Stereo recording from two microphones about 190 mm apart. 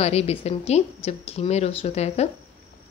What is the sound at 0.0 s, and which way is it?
Speech, 35° left (ahead or behind).